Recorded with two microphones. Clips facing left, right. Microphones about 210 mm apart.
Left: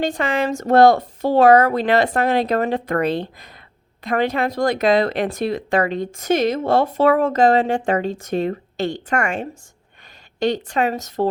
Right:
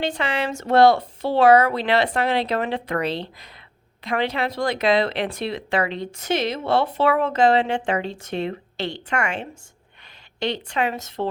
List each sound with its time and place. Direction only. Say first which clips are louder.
0.0 s speech: left 4 dB; 45° left (ahead or behind)